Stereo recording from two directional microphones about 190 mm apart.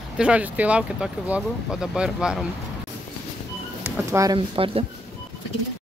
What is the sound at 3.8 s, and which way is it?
Speech, 15° right (ahead or behind).